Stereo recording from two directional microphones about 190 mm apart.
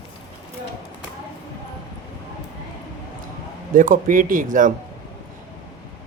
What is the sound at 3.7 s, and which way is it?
Speech, 45° right (ahead or behind).